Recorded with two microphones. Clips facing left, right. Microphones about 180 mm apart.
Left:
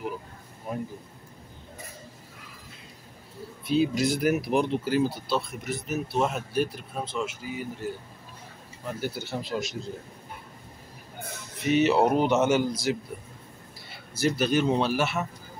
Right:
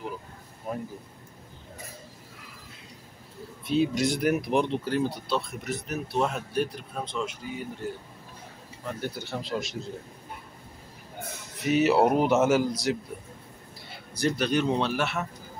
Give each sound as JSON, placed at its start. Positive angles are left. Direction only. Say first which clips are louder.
{"t": 0.7, "sound": "speech", "louder": "even", "side_deg": 5}
{"t": 3.6, "sound": "speech", "louder": "left 1 dB", "side_deg": 0}
{"t": 9.0, "sound": "speech", "louder": "left 2 dB", "side_deg": 5}
{"t": 11.6, "sound": "speech", "louder": "even", "side_deg": -5}
{"t": 14.1, "sound": "speech", "louder": "left 1 dB", "side_deg": 5}